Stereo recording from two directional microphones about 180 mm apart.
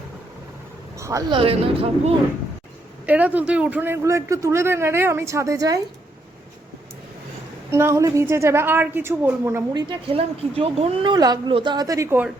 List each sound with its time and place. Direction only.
0.9 s a woman's voice: 15° right (ahead or behind)
1.4 s speech: 30° right (ahead or behind)
3.1 s a man's voice: 10° right (ahead or behind)
7.7 s a man's voice: 15° right (ahead or behind)
9.9 s a woman's voice: 30° right (ahead or behind); by 12.3 s 10° right (ahead or behind)